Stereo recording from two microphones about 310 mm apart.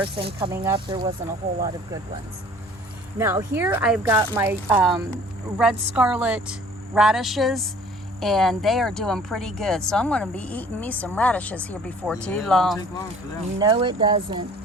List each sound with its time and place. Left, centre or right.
0.2 s speech: centre
3.2 s speech: centre
13.6 s speech: centre